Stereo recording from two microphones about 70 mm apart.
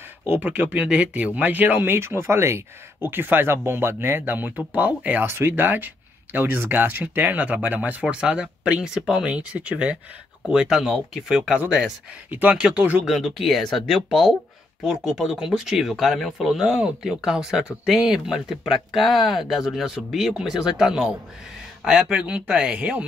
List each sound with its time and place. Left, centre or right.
0.4 s speech: right
2.0 s speech: right
5.2 s speech: right
8.0 s speech: centre
12.3 s speech: right
12.5 s speech: centre
13.0 s speech: centre